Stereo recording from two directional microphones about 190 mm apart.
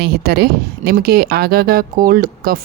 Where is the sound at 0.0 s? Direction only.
55° right (ahead or behind).